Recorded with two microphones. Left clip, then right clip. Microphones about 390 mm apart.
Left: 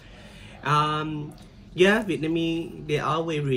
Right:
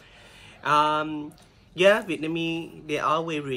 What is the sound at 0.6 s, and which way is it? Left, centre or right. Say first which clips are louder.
Speech: right 2 dB; centre.